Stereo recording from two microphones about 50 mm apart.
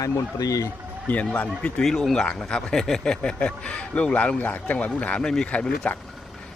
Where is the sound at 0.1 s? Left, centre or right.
Left.